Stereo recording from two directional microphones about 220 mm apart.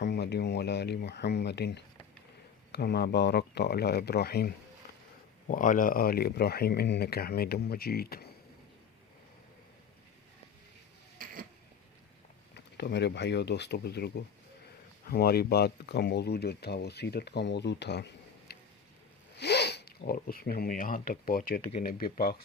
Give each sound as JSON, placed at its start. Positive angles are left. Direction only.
{"t": 0.0, "sound": "speech", "side_deg": 50}
{"t": 11.2, "sound": "a sound", "side_deg": -40}
{"t": 12.5, "sound": "speech", "side_deg": 50}